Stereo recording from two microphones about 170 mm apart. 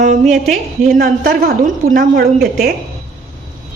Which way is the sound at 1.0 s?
50° right (ahead or behind).